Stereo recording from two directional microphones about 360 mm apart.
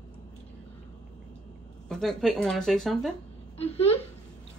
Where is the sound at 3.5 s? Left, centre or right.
Centre.